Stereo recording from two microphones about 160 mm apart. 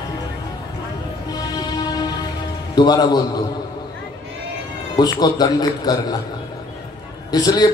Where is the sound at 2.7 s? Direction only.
25° left (ahead or behind).